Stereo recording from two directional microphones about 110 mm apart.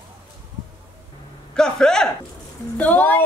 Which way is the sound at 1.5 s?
5° left (ahead or behind).